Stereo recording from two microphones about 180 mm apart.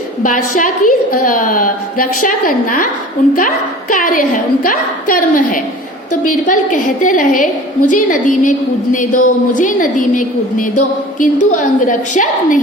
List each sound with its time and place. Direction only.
0.2 s a woman's voice: 45° left (ahead or behind)